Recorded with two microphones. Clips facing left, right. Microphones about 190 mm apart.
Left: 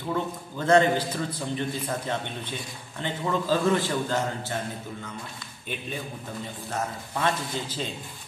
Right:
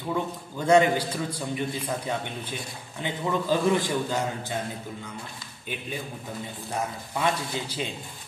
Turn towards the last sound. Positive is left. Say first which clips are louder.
# even
turn(degrees=-10)  # may be behind; listen again after turning